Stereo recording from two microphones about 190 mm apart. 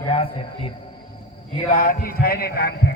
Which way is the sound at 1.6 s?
45° left (ahead or behind).